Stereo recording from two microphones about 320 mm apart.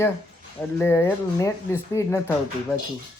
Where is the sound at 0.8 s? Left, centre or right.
Centre.